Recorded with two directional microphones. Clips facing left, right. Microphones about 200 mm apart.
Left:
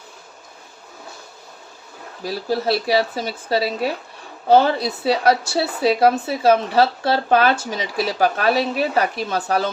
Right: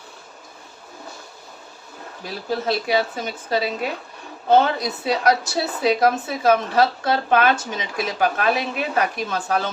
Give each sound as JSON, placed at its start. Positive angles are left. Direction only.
{"t": 2.5, "sound": "speech", "side_deg": 35}